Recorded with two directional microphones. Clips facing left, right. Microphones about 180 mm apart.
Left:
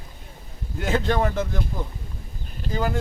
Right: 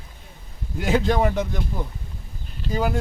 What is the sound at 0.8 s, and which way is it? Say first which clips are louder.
Speech: right 2 dB; 5° right (ahead or behind).